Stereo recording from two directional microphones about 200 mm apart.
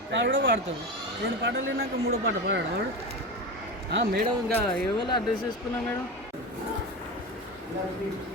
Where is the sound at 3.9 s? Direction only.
60° right (ahead or behind).